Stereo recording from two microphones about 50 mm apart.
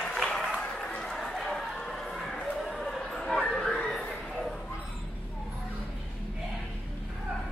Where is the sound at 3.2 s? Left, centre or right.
Centre.